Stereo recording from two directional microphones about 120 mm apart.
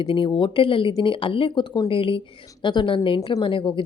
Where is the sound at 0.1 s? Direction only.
45° left (ahead or behind).